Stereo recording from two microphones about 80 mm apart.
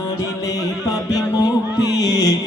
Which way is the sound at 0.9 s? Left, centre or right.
Left.